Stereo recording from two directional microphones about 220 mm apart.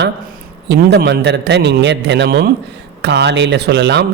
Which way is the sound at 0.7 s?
50° right (ahead or behind).